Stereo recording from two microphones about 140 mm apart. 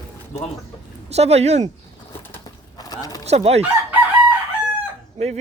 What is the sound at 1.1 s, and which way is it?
Speech, 50° right (ahead or behind).